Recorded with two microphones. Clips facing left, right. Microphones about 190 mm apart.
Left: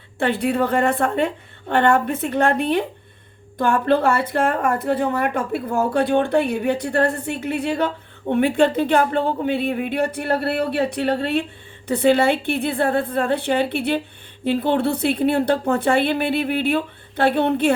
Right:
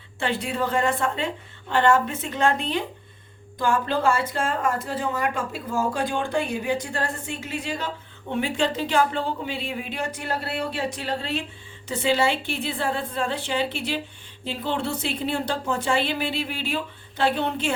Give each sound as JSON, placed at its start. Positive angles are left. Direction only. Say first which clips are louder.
{"t": 0.2, "sound": "a woman's voice", "louder": "left 7 dB", "side_deg": 60}